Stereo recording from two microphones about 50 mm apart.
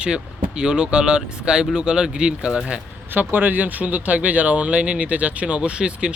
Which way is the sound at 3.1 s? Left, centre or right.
Right.